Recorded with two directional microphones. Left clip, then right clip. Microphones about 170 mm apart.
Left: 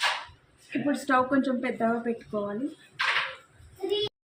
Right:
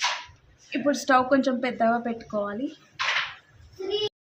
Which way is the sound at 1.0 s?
25° right (ahead or behind).